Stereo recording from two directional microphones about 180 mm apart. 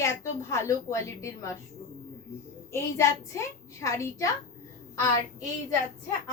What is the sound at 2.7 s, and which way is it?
A woman's voice, 15° left (ahead or behind).